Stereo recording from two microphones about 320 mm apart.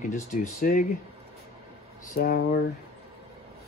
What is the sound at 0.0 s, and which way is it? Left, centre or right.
Speech, left.